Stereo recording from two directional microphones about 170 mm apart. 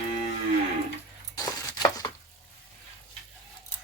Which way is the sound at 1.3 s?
20° left (ahead or behind).